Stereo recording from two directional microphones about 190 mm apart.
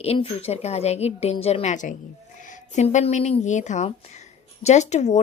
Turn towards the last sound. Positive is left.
turn(degrees=35)  # may be behind; listen again after turning